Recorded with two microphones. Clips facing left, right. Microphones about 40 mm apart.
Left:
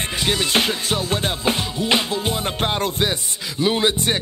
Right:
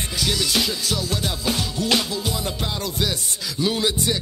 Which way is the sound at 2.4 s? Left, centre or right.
Left.